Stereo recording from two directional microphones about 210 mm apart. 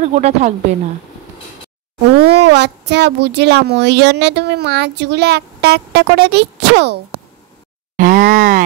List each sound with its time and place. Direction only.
0.0 s speech: 35° right (ahead or behind)
2.1 s speech: 50° right (ahead or behind)
8.0 s speech: 40° right (ahead or behind)